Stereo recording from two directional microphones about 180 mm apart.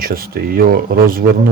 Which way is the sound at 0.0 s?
55° right (ahead or behind).